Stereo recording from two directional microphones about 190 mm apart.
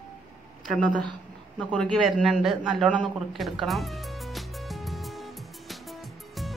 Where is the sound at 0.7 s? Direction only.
5° left (ahead or behind).